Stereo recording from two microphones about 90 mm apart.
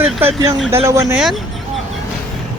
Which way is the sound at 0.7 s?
35° right (ahead or behind).